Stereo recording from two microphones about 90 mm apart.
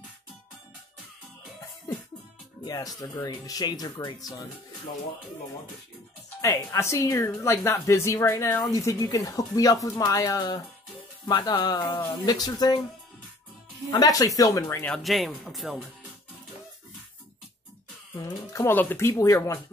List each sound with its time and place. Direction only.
2.6 s speech: 45° left (ahead or behind)
6.7 s a woman's voice: 35° left (ahead or behind)
8.7 s a woman's voice: 40° left (ahead or behind)
11.2 s speech: 50° left (ahead or behind)
11.8 s speech: 25° left (ahead or behind)
12.3 s speech: 50° left (ahead or behind)
13.8 s a woman's voice: 40° left (ahead or behind)
15.0 s speech: centre (ahead or behind)
18.1 s a woman's voice: 40° left (ahead or behind)
18.7 s a woman's voice: 25° left (ahead or behind)